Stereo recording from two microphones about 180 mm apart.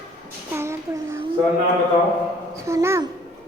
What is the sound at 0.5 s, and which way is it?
Child singing, 15° right (ahead or behind).